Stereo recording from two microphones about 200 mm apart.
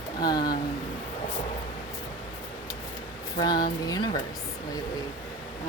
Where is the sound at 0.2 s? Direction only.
20° left (ahead or behind).